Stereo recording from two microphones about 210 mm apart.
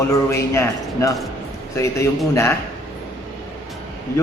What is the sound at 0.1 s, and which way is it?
A man's voice, 15° left (ahead or behind).